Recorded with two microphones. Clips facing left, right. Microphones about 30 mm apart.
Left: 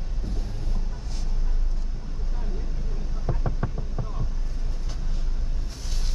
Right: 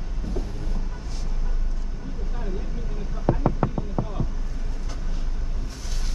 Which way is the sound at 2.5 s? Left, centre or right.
Right.